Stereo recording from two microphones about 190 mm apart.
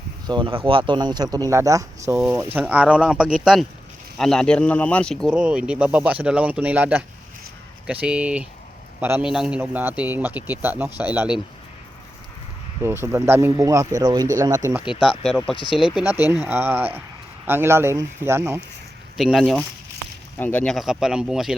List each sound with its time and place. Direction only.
0.3 s a man's voice: 25° right (ahead or behind); by 11.3 s 5° right (ahead or behind)
12.8 s a man's voice: 15° right (ahead or behind)
15.0 s a man's voice: centre (ahead or behind); by 18.6 s 15° right (ahead or behind)
19.1 s speech: centre (ahead or behind)